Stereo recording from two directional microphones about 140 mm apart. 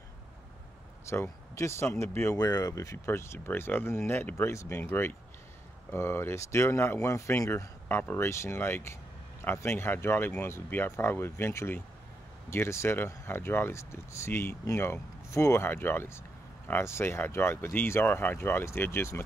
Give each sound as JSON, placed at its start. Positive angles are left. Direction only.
{"t": 1.0, "sound": "speech", "side_deg": 20}